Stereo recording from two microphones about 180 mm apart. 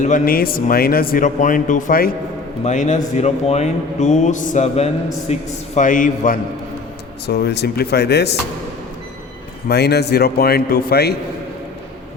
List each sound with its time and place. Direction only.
0.0 s speech: 50° left (ahead or behind)
7.3 s a man's voice: 65° left (ahead or behind)
9.6 s a man's voice: 65° left (ahead or behind)